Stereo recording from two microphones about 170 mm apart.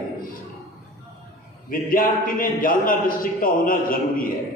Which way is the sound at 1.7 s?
55° left (ahead or behind).